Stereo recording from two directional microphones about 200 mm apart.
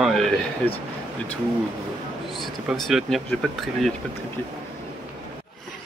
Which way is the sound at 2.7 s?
Centre (ahead or behind).